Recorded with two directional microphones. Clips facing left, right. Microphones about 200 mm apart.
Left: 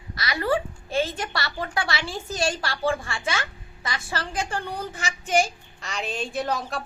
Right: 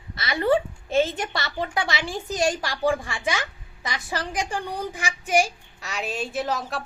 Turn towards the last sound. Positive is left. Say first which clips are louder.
# even
turn(degrees=0)  # may be behind; listen again after turning